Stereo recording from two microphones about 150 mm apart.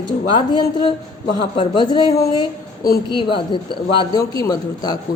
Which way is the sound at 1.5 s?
35° left (ahead or behind).